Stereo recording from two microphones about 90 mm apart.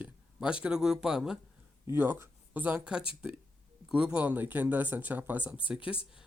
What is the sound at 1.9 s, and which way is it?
Speech, 20° right (ahead or behind).